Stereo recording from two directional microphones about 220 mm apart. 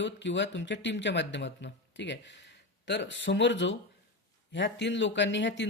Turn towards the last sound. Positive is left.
turn(degrees=55)  # may be behind; listen again after turning